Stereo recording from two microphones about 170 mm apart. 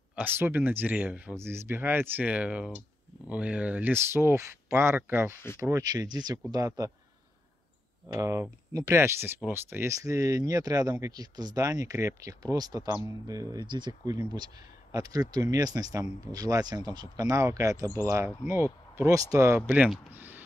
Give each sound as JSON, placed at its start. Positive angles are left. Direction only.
{"t": 0.1, "sound": "speech", "side_deg": -10}
{"t": 8.2, "sound": "speech", "side_deg": -15}